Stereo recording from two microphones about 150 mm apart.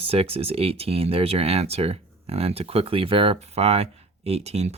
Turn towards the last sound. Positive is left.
turn(degrees=-45)  # may be behind; listen again after turning